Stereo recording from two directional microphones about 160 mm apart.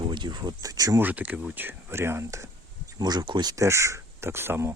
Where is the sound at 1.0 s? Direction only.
10° right (ahead or behind).